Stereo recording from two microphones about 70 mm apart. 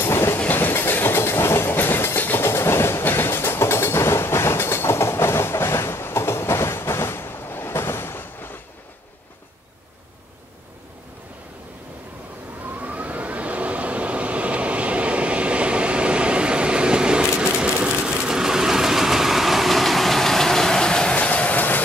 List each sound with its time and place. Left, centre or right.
0.0 s train: left
12.8 s vehicle: right; by 21.8 s left